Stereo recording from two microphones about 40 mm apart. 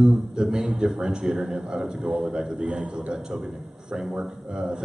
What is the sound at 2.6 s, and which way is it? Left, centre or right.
Speech, right.